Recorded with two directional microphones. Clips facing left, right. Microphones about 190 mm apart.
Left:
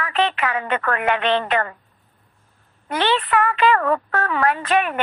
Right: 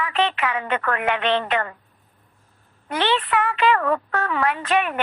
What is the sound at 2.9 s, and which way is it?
A woman's voice, 45° left (ahead or behind).